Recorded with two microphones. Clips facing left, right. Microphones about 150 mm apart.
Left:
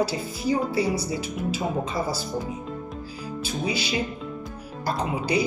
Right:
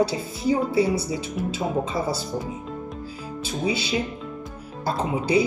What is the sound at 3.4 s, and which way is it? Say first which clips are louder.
Speech: right 3 dB; 25° right (ahead or behind).